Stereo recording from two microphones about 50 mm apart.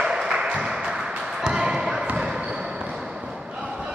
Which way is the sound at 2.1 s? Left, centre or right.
Centre.